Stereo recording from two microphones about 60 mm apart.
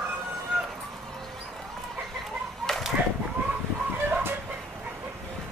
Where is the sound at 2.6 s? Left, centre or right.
Centre.